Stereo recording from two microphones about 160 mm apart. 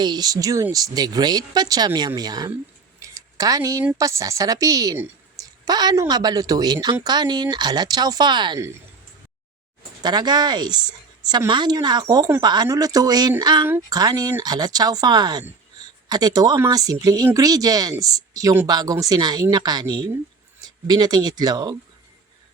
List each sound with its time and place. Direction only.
0.0 s a woman's voice: 25° right (ahead or behind)
3.0 s a sound: 20° right (ahead or behind)
3.9 s a woman's voice: 20° right (ahead or behind)
10.0 s a woman's voice: 25° right (ahead or behind)